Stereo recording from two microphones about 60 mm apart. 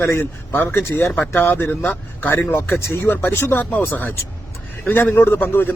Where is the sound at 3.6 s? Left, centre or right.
Left.